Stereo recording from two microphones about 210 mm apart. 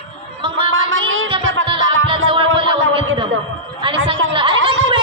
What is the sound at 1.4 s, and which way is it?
Music, 70° right (ahead or behind).